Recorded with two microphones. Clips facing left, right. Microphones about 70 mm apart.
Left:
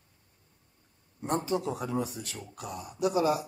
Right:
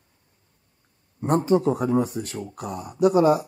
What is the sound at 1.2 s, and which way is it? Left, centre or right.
Speech, right.